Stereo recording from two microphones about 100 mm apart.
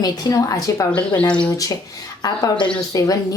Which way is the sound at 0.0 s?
35° left (ahead or behind).